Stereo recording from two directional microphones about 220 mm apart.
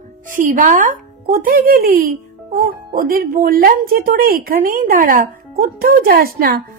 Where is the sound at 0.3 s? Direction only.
35° right (ahead or behind).